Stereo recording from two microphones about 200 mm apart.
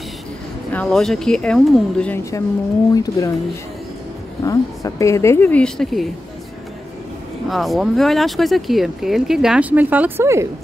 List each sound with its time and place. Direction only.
0.7 s a woman's voice: 5° left (ahead or behind)
4.4 s a woman's voice: 15° left (ahead or behind); by 6.0 s centre (ahead or behind)
7.4 s speech: centre (ahead or behind)